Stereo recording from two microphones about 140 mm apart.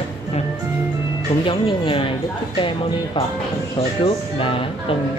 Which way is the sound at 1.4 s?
40° left (ahead or behind).